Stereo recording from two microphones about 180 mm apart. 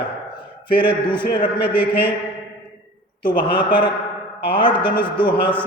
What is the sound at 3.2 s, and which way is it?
A man's voice, 25° left (ahead or behind).